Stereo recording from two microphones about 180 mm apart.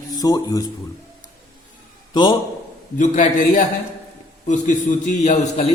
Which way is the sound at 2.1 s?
25° left (ahead or behind).